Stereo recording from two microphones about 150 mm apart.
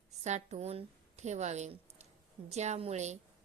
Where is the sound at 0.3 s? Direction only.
50° right (ahead or behind).